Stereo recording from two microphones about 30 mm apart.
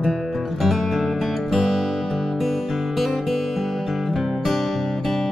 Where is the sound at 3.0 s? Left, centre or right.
Centre.